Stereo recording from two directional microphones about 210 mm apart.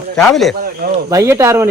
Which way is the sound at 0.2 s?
Centre (ahead or behind).